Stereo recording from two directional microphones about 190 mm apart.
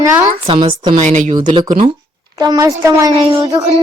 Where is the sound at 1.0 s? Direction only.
40° right (ahead or behind).